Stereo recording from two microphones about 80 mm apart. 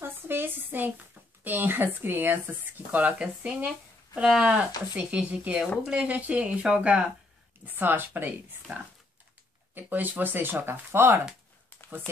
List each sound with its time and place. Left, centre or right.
0.0 s speech: right
7.6 s speech: right